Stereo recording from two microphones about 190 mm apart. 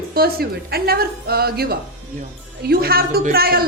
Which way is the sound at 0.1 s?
55° right (ahead or behind).